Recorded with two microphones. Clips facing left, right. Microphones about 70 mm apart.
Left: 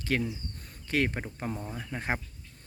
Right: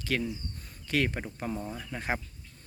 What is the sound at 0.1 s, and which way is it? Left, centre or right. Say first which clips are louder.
Speech: left 1 dB; left.